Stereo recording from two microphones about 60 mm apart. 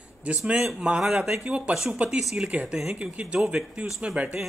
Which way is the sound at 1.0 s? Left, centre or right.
Centre.